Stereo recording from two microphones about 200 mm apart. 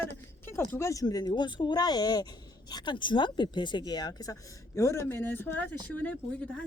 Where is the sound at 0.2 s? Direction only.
10° left (ahead or behind).